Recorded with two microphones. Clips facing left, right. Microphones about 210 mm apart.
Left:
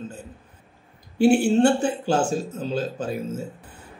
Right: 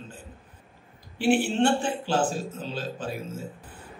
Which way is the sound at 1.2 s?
40° left (ahead or behind).